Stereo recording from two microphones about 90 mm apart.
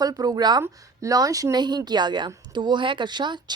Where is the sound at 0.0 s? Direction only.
45° right (ahead or behind).